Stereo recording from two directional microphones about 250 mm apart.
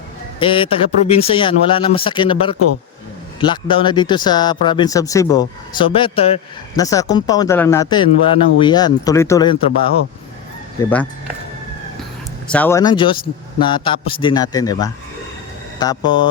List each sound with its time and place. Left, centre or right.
0.3 s speech: centre
10.8 s speech: centre
12.5 s speech: centre